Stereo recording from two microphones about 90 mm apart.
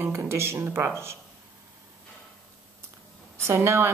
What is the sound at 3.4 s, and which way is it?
Speech, 30° right (ahead or behind).